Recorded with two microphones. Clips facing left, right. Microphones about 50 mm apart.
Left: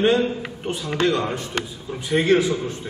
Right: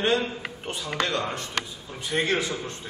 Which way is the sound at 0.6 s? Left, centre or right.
Centre.